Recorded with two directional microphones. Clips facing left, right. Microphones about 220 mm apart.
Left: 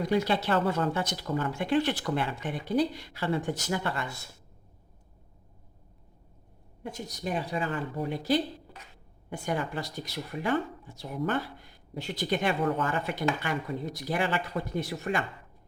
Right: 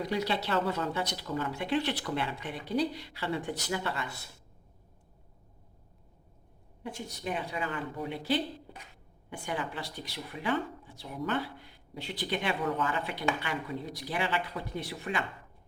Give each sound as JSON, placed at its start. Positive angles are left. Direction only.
{"t": 0.0, "sound": "speech", "side_deg": 50}
{"t": 6.8, "sound": "speech", "side_deg": 40}